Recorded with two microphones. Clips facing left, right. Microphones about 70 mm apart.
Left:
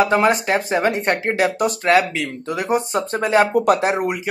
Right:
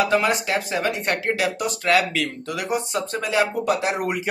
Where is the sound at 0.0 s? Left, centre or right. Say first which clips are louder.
Left 4 dB; left.